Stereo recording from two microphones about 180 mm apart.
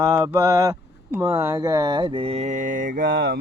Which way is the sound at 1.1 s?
15° right (ahead or behind).